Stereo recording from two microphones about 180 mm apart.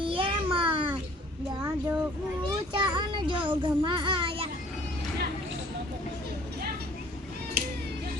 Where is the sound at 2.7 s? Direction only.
25° right (ahead or behind).